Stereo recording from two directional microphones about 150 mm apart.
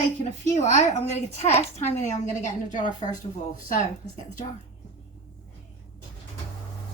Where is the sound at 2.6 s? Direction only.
60° left (ahead or behind).